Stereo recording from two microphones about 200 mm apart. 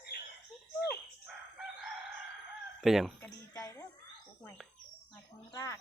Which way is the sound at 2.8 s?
Centre (ahead or behind).